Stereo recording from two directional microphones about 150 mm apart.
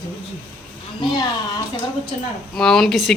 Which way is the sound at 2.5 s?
5° left (ahead or behind).